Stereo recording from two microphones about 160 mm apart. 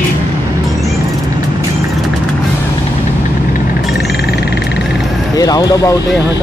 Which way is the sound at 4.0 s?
90° left.